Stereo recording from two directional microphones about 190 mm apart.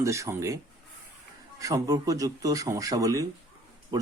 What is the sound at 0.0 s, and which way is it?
Speech, 15° right (ahead or behind).